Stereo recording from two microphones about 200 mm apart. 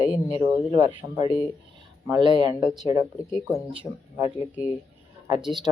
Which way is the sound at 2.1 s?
25° right (ahead or behind).